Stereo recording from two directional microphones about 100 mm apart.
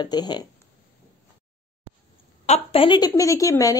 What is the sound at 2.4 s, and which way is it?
Speech, 80° left.